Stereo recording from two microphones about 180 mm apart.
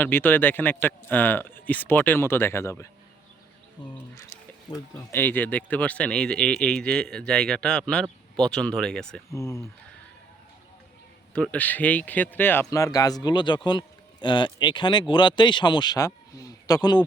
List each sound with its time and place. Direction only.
0.0 s speech: 10° left (ahead or behind)
3.8 s speech: 25° left (ahead or behind)
4.7 s speech: 15° left (ahead or behind)
9.3 s speech: 15° left (ahead or behind)
11.3 s speech: 5° left (ahead or behind)